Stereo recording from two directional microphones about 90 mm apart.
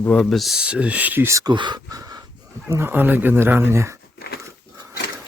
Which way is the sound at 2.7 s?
25° right (ahead or behind).